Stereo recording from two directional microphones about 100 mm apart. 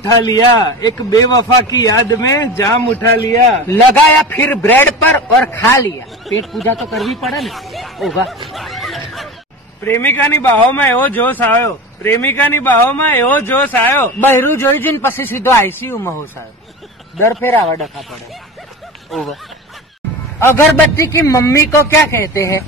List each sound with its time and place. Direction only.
0.0 s a man's voice: 40° left (ahead or behind)
4.3 s speech: 15° left (ahead or behind)
6.2 s speech: centre (ahead or behind)
8.5 s snicker: centre (ahead or behind)
9.8 s speech: 20° left (ahead or behind)
17.2 s speech: 25° left (ahead or behind)
19.0 s speech: centre (ahead or behind)
20.3 s speech: 25° left (ahead or behind)